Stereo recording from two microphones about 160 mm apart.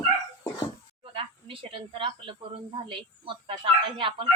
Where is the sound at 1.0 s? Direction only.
35° right (ahead or behind).